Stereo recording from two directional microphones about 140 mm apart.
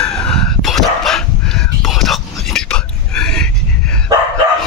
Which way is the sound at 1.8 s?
Centre (ahead or behind).